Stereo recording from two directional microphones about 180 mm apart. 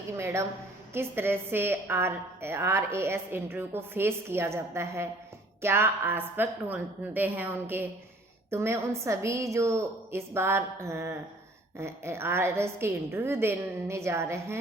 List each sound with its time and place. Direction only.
0.9 s a woman's voice: 10° right (ahead or behind)